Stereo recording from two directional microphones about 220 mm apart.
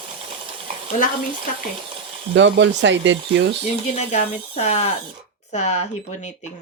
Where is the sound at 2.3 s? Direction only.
55° right (ahead or behind).